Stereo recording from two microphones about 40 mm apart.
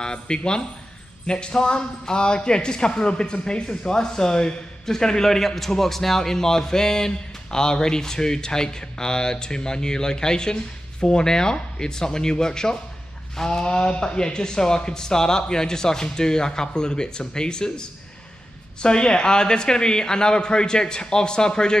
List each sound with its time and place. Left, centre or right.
0.0 s a man's voice: left
18.8 s speech: left